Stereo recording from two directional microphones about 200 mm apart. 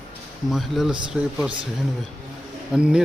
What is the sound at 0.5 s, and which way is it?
Speech, centre (ahead or behind).